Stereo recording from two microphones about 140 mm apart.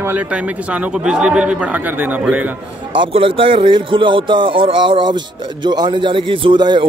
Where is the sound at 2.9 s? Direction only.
40° right (ahead or behind).